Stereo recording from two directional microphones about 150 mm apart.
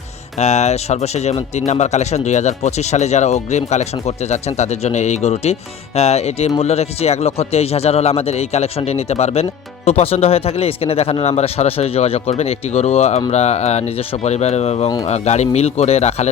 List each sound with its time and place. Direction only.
0.3 s speech: 50° left (ahead or behind)